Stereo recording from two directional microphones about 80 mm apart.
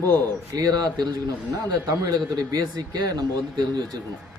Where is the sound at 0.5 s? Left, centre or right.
Right.